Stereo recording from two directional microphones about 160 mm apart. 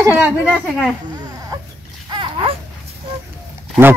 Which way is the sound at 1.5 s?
25° right (ahead or behind).